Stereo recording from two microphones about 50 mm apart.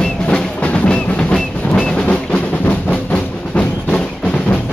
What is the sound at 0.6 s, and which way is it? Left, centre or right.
Music, left.